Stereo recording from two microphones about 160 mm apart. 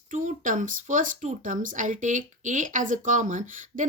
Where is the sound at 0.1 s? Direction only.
55° right (ahead or behind).